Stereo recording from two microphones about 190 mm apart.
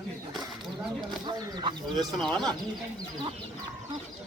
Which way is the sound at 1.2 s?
20° right (ahead or behind).